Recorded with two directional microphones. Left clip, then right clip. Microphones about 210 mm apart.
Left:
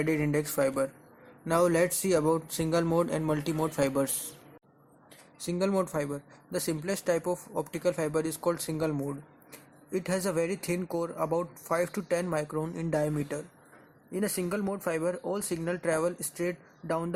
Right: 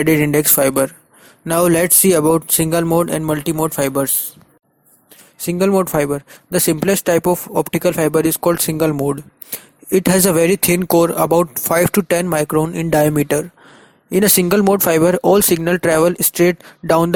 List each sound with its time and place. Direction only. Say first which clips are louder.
0.0 s speech: right 14 dB; 40° right (ahead or behind)
5.5 s speech: right 14 dB; 40° right (ahead or behind)